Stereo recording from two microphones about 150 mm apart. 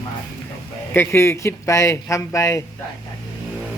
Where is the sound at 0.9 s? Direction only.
15° left (ahead or behind).